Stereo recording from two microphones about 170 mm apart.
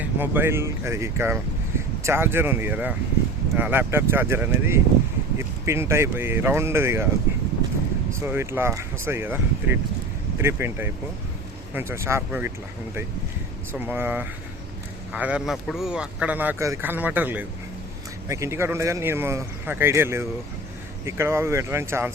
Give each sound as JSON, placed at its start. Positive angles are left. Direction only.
{"t": 0.0, "sound": "speech", "side_deg": -10}
{"t": 8.1, "sound": "speech", "side_deg": -15}
{"t": 13.7, "sound": "speech", "side_deg": -10}